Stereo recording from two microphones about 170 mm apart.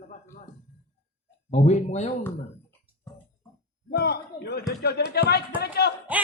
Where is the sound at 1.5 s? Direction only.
45° left (ahead or behind).